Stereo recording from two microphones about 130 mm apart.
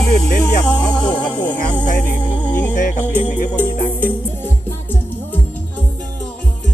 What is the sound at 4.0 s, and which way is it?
Music, 15° left (ahead or behind).